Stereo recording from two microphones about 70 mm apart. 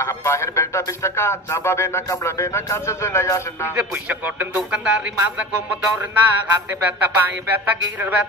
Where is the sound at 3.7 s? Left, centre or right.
Right.